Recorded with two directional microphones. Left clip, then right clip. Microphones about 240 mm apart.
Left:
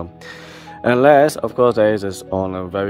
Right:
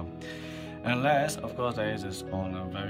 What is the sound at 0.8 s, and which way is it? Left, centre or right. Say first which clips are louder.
Speech: left 15 dB; centre.